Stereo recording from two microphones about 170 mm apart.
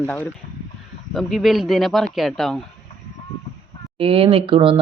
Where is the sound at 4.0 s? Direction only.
30° right (ahead or behind).